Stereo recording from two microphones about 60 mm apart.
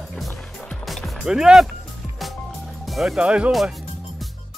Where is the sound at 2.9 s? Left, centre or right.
Centre.